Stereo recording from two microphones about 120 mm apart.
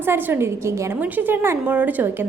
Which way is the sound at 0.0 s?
15° right (ahead or behind).